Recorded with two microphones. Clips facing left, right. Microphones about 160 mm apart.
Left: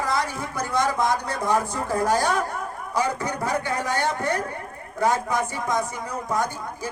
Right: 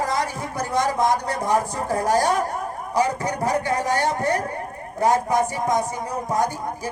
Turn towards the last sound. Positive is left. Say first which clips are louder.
# right 4 dB
turn(degrees=-40)  # may be behind; listen again after turning